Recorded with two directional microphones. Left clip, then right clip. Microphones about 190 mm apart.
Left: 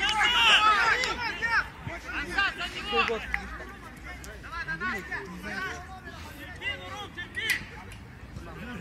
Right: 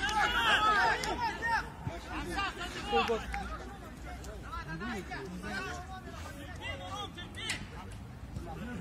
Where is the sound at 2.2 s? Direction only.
70° right (ahead or behind).